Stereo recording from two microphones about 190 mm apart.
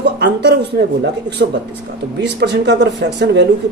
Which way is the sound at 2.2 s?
65° right (ahead or behind).